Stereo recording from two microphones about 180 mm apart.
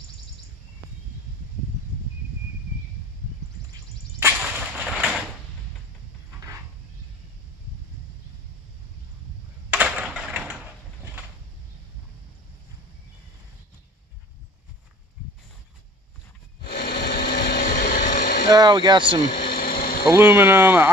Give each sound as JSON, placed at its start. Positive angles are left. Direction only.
{"t": 4.2, "sound": "whip", "side_deg": -10}
{"t": 9.7, "sound": "typing", "side_deg": -5}
{"t": 16.6, "sound": "a sound", "side_deg": 65}
{"t": 18.5, "sound": "speech", "side_deg": -25}
{"t": 19.2, "sound": "a sound", "side_deg": 55}
{"t": 20.1, "sound": "speech", "side_deg": -10}